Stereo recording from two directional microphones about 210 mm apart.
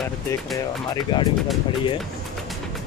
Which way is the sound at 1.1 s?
20° left (ahead or behind).